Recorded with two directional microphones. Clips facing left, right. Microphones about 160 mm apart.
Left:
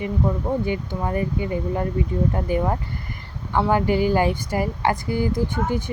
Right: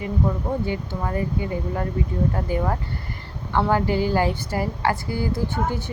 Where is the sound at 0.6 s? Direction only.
20° left (ahead or behind).